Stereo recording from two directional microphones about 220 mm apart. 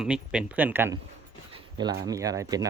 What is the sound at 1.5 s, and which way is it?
Dog, 20° right (ahead or behind).